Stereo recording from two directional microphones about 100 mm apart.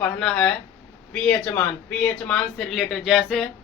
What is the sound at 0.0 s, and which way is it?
Speech, 10° left (ahead or behind).